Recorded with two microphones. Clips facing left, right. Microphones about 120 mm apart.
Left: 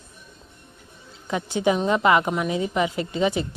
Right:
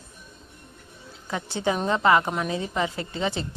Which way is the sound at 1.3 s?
15° left (ahead or behind).